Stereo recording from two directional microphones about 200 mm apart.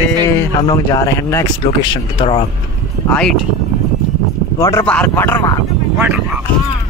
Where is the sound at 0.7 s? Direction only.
20° left (ahead or behind).